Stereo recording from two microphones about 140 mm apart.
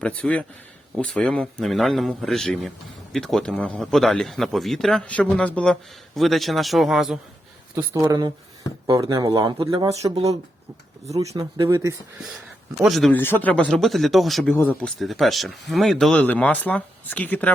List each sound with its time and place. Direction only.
0.0 s a man's voice: 10° left (ahead or behind)
7.8 s speech: 25° right (ahead or behind)
11.2 s speech: 25° right (ahead or behind)
12.7 s a man's voice: centre (ahead or behind)
13.1 s a man's voice: 15° left (ahead or behind)
14.5 s speech: 15° left (ahead or behind)